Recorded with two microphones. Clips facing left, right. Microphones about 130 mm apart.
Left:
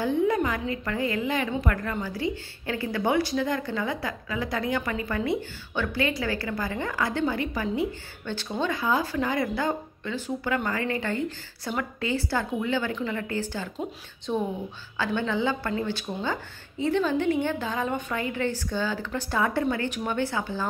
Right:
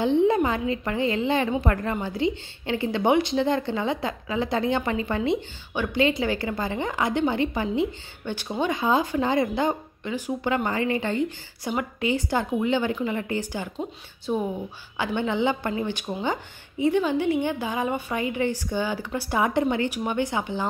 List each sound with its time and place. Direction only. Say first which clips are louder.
0.0 s a woman's voice: right 4 dB; 25° right (ahead or behind); by 14.4 s 5° right (ahead or behind)
15.0 s a woman's voice: right 2 dB; 20° right (ahead or behind)